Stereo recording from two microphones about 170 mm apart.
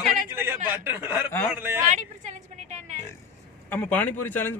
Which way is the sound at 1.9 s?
45° right (ahead or behind).